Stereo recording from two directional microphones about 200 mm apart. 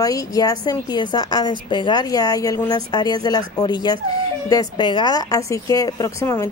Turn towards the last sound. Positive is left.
turn(degrees=15)  # may be behind; listen again after turning